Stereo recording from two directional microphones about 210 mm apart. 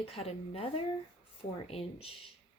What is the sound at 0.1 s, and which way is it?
Speech, 30° left (ahead or behind).